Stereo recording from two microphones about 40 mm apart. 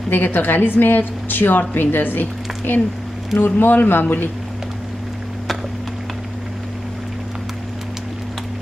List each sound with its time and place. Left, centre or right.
0.1 s a woman's voice: left
3.3 s a woman's voice: left